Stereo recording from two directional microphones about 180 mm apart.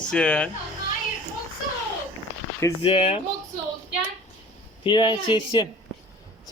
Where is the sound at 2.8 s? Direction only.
35° left (ahead or behind).